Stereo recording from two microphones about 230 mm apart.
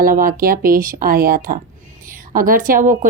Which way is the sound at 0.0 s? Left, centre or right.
Right.